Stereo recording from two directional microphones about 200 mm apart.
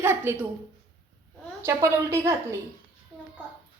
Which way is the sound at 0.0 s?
10° right (ahead or behind).